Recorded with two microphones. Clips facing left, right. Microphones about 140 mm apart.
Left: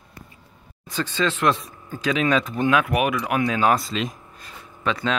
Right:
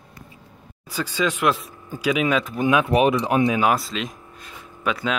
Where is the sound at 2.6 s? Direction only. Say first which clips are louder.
Right 4 dB; 20° right (ahead or behind).